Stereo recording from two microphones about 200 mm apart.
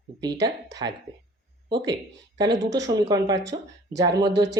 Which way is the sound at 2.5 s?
60° right (ahead or behind).